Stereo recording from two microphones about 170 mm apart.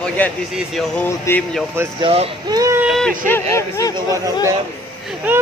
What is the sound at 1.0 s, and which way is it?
Speech, 15° left (ahead or behind).